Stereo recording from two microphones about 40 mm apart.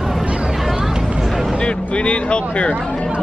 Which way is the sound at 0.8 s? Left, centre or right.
Centre.